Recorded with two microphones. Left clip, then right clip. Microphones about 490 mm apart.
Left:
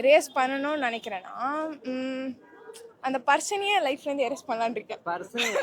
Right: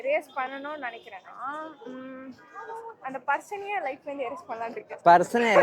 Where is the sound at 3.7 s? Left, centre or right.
Left.